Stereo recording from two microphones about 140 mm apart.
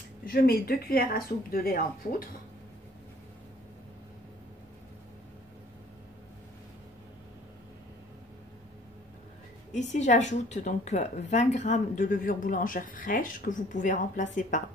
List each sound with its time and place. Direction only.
0.2 s speech: 90° left
9.7 s a woman's voice: 55° left (ahead or behind)